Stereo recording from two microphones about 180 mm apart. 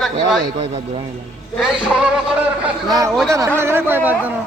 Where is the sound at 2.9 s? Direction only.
20° right (ahead or behind).